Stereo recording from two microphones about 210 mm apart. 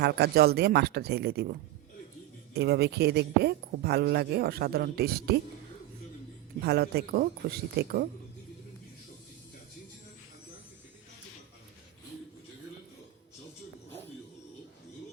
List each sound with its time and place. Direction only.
0.0 s speech: 50° right (ahead or behind)
6.6 s speech: 50° right (ahead or behind)